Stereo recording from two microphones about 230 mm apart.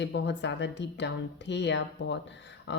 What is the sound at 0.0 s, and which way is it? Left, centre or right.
Speech, left.